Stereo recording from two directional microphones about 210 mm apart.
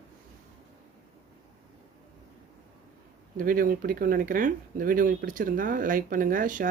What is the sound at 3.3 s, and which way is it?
Speech, 40° right (ahead or behind).